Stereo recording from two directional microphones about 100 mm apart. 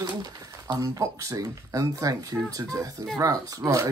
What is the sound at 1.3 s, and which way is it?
Speech, 35° right (ahead or behind).